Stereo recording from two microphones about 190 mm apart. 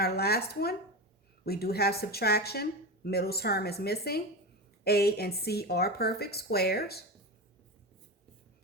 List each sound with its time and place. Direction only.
0.0 s a woman's voice: 55° left (ahead or behind)